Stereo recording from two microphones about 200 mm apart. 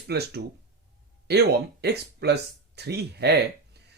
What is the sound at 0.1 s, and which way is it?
Speech, 55° right (ahead or behind).